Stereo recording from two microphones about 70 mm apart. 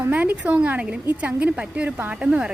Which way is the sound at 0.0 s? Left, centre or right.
Right.